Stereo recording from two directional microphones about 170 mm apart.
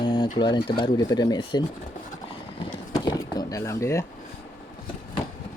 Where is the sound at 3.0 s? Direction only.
20° left (ahead or behind).